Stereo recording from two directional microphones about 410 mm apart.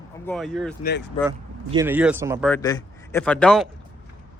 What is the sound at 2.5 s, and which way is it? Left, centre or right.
Speech, centre.